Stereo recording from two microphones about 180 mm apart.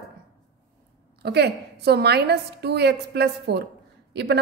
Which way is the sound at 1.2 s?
65° right (ahead or behind).